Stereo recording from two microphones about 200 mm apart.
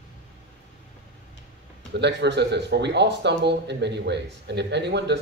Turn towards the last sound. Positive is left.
turn(degrees=-60)  # may be behind; listen again after turning